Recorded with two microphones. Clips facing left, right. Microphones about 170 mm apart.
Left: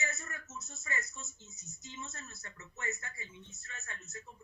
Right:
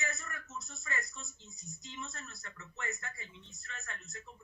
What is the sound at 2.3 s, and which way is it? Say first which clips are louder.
Speech: right 1 dB; 20° left (ahead or behind).